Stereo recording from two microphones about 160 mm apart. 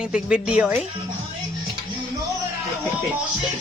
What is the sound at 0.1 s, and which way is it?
Speech, 5° right (ahead or behind).